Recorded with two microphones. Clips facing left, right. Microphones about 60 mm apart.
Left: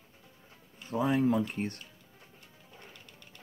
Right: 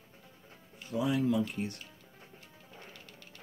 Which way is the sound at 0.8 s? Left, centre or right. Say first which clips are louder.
Left 2 dB; left.